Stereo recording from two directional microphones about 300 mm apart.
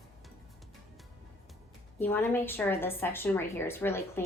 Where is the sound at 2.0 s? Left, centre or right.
Centre.